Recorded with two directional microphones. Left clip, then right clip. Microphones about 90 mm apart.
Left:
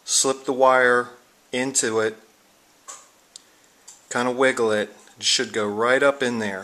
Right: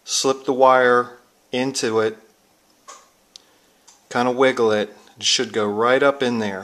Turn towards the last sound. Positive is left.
turn(degrees=-20)  # may be behind; listen again after turning